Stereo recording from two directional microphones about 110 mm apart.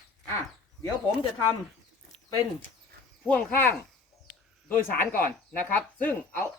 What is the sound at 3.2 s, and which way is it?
Speech, 10° left (ahead or behind).